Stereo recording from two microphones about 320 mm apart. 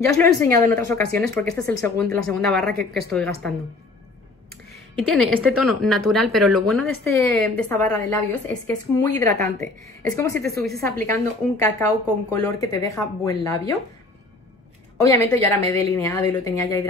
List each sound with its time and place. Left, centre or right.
0.2 s a woman's voice: centre
0.9 s a woman's voice: right
1.6 s speech: centre
5.0 s a woman's voice: centre
10.4 s a woman's voice: right
11.1 s a woman's voice: centre
15.0 s a woman's voice: centre